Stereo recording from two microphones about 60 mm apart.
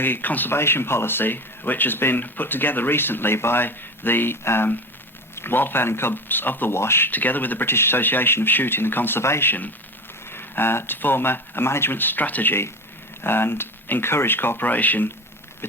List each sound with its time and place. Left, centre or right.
0.0 s speech: left
0.5 s speech: left
6.7 s speech: left
7.1 s speech: left